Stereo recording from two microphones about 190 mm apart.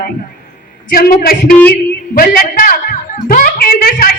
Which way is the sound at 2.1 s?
50° left (ahead or behind).